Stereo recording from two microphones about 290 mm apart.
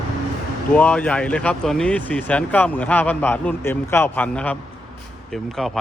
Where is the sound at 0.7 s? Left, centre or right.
Centre.